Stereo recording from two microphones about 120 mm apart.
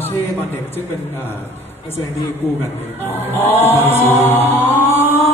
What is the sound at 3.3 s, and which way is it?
Chant, 20° left (ahead or behind).